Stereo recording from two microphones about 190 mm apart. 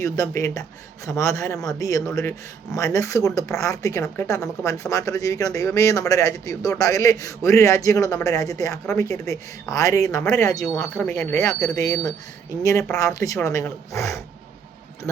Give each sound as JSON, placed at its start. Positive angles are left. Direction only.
{"t": 0.0, "sound": "speech", "side_deg": 15}
{"t": 2.0, "sound": "speech", "side_deg": 5}
{"t": 2.7, "sound": "speech", "side_deg": 15}
{"t": 13.1, "sound": "speech", "side_deg": 15}